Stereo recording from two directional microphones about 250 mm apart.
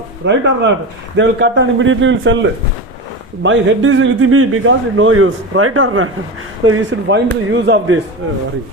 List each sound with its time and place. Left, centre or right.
0.3 s a man's voice: right